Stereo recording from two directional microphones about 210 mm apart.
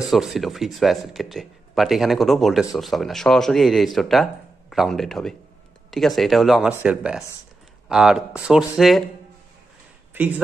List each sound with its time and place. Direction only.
0.1 s speech: centre (ahead or behind)
10.2 s speech: 10° right (ahead or behind)